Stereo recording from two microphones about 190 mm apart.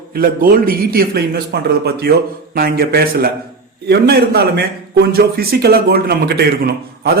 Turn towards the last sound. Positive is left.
turn(degrees=-55)  # may be behind; listen again after turning